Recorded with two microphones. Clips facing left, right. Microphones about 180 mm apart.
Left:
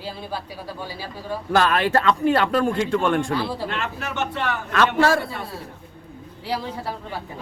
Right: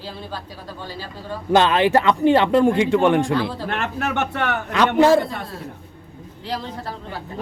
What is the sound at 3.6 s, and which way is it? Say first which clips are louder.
Speech: right 4 dB; 60° right (ahead or behind).